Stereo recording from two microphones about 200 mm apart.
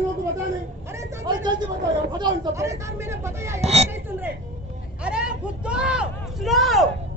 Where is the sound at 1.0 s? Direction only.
20° right (ahead or behind).